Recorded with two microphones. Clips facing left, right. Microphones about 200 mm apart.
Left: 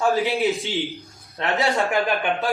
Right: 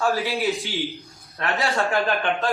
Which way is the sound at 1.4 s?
15° left (ahead or behind).